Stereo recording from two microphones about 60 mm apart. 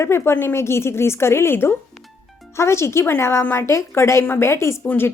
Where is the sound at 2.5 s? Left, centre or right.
Left.